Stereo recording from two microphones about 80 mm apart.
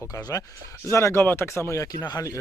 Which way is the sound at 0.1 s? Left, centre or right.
Left.